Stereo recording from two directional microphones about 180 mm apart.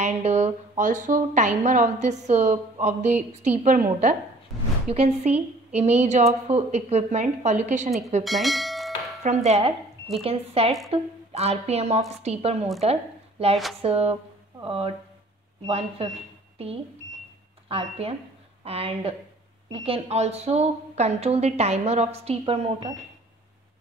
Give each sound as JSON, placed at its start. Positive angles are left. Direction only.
{"t": 0.0, "sound": "a woman's voice", "side_deg": -40}
{"t": 4.9, "sound": "a woman's voice", "side_deg": -35}
{"t": 8.2, "sound": "speech", "side_deg": 0}
{"t": 9.2, "sound": "a woman's voice", "side_deg": -35}
{"t": 13.7, "sound": "a woman's voice", "side_deg": -35}